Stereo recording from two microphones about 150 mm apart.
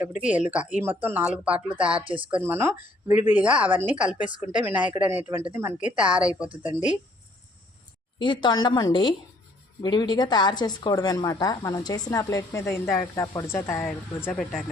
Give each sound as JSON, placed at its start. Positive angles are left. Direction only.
{"t": 0.0, "sound": "speech", "side_deg": -10}
{"t": 2.0, "sound": "speech", "side_deg": -35}
{"t": 2.4, "sound": "speech", "side_deg": -15}
{"t": 8.2, "sound": "a woman's voice", "side_deg": 30}